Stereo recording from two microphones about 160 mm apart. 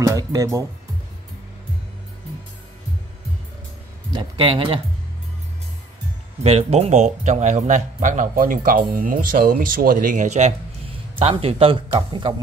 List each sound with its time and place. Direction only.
0.0 s speech: 20° right (ahead or behind)
4.1 s speech: 30° right (ahead or behind)
6.4 s speech: 40° right (ahead or behind)
11.1 s speech: 35° right (ahead or behind)